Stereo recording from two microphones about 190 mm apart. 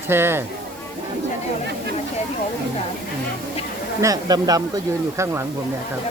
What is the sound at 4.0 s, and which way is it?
Speech, 20° right (ahead or behind).